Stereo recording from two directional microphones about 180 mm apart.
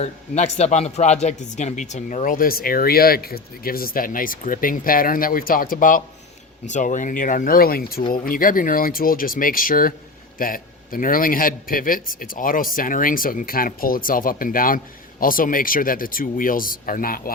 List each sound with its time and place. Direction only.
0.0 s speech: 40° left (ahead or behind)